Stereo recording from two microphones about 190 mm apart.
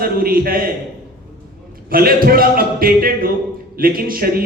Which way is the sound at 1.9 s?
50° right (ahead or behind).